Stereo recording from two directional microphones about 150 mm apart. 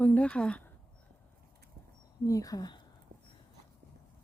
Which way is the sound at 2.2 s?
25° left (ahead or behind).